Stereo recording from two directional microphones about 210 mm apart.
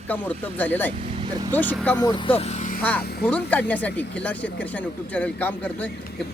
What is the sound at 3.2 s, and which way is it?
Speech, 5° left (ahead or behind).